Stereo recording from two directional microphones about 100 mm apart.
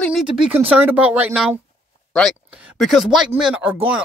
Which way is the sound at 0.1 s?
5° right (ahead or behind).